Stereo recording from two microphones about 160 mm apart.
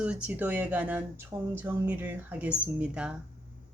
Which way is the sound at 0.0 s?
5° right (ahead or behind).